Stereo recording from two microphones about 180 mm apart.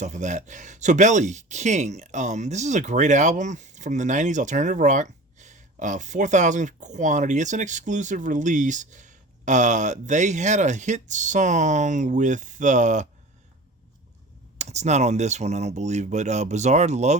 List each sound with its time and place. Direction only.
0.0 s speech: 40° right (ahead or behind)
14.6 s speech: 40° right (ahead or behind)